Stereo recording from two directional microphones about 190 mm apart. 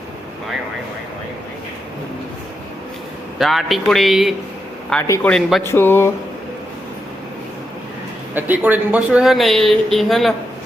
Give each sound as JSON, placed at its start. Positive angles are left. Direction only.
{"t": 3.3, "sound": "speech", "side_deg": 0}
{"t": 5.0, "sound": "speech", "side_deg": 15}
{"t": 5.3, "sound": "speech", "side_deg": 0}
{"t": 5.6, "sound": "speech", "side_deg": 10}
{"t": 8.4, "sound": "speech", "side_deg": -10}